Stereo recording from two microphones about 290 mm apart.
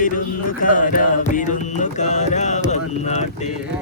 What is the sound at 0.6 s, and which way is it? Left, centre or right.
Mantra, left.